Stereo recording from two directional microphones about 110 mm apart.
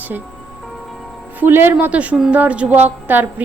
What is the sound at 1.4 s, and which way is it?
A woman's voice, 20° right (ahead or behind).